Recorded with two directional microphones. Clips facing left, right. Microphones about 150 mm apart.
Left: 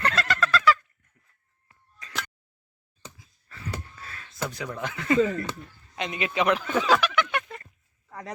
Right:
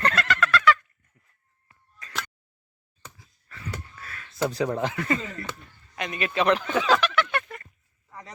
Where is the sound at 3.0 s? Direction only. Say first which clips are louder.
Left 1 dB; 25° left (ahead or behind).